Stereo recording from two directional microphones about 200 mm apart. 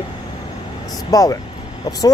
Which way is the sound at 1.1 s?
15° left (ahead or behind).